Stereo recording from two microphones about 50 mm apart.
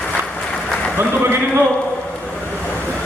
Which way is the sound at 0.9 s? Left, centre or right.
Right.